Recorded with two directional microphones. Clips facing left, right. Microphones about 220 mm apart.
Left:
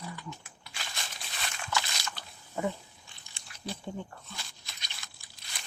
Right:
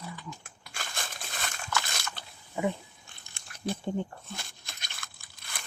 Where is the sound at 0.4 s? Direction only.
50° right (ahead or behind).